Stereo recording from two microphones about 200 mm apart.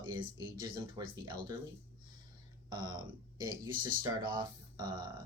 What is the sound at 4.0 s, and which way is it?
Speech, 20° right (ahead or behind).